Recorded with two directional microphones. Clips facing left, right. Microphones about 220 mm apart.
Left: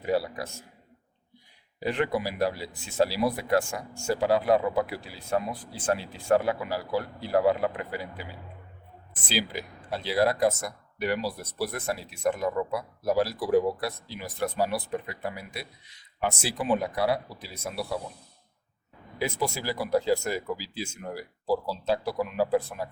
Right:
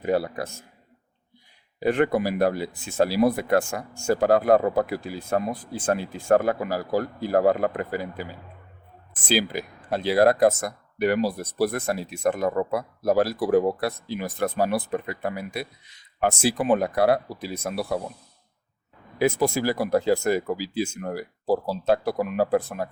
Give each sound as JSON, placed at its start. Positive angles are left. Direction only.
{"t": 0.0, "sound": "speech", "side_deg": -50}
{"t": 1.8, "sound": "speech", "side_deg": -50}
{"t": 19.2, "sound": "speech", "side_deg": -50}